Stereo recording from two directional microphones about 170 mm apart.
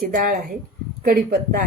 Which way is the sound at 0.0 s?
55° right (ahead or behind).